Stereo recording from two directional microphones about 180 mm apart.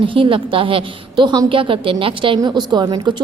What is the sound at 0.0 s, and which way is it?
A woman's voice, 30° right (ahead or behind).